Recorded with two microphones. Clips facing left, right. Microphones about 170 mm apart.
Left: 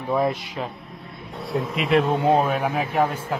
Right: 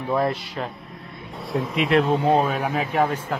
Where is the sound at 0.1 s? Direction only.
Centre (ahead or behind).